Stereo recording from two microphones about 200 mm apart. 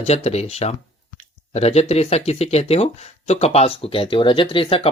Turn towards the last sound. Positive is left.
turn(degrees=25)  # may be behind; listen again after turning